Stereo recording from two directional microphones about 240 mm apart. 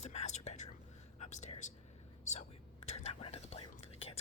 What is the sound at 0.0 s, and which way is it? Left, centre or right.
Whispering, left.